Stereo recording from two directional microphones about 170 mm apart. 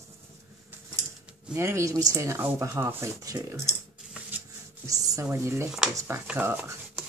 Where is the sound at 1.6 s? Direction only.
15° right (ahead or behind).